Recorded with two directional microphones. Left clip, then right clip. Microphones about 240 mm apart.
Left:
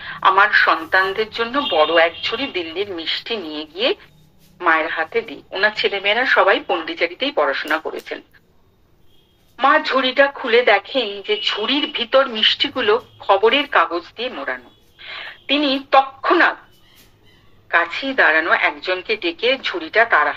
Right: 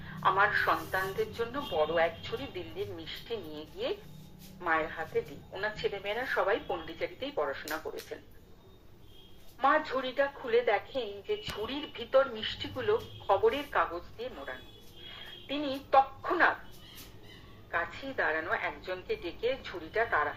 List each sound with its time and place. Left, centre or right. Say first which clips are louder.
0.0 s a woman's voice: left 13 dB; left
9.6 s a woman's voice: left 13 dB; left
17.6 s a woman's voice: left 16 dB; left